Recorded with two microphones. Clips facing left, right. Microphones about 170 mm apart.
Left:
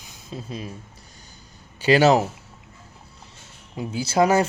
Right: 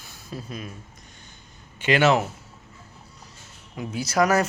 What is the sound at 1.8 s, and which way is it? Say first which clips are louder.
Speech: left 3 dB; 35° left (ahead or behind).